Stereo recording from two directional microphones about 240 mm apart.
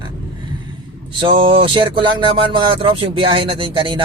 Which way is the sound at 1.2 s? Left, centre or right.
Right.